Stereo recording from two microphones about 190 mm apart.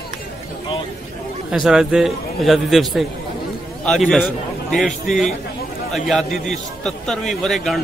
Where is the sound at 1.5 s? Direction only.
Centre (ahead or behind).